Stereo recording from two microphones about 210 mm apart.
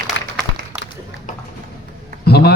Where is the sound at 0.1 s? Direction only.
60° left (ahead or behind).